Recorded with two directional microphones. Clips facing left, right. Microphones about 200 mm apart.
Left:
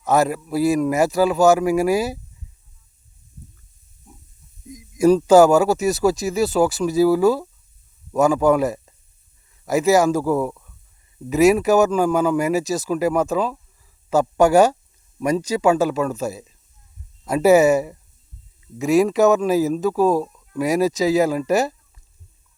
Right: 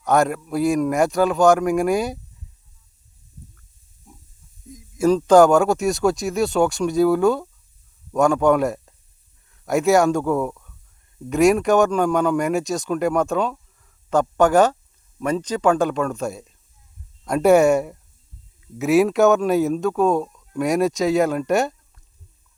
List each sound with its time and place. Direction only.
0.0 s speech: centre (ahead or behind)
4.1 s pig: centre (ahead or behind)
4.7 s a man's voice: 15° left (ahead or behind)